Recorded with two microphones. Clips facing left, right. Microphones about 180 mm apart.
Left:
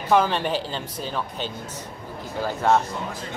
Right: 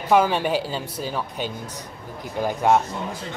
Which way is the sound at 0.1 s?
10° right (ahead or behind).